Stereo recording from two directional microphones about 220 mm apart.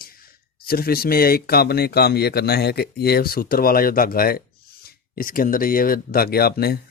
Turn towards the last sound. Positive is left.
turn(degrees=45)  # may be behind; listen again after turning